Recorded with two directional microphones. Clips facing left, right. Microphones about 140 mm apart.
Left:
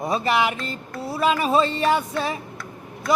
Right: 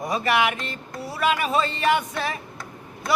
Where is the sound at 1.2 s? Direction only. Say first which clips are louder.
Left 3 dB; 30° left (ahead or behind).